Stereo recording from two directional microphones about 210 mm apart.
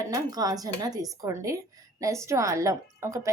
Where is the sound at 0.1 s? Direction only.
15° right (ahead or behind).